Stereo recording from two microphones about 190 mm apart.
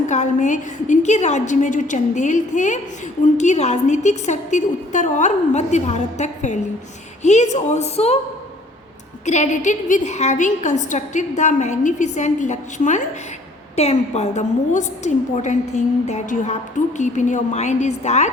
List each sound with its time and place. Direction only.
0.1 s a woman's voice: 40° left (ahead or behind)
9.2 s a woman's voice: 40° left (ahead or behind)